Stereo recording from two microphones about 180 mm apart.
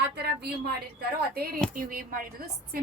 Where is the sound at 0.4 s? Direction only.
60° right (ahead or behind).